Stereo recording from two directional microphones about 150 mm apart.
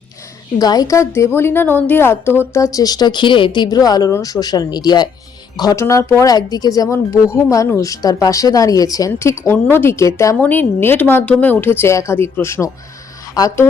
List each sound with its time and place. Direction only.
0.6 s a woman's voice: 25° left (ahead or behind)